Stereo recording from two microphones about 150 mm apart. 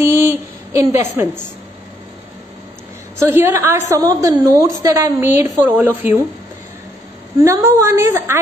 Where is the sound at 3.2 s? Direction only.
15° right (ahead or behind).